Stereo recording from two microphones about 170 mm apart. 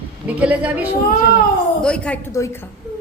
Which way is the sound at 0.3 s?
10° right (ahead or behind).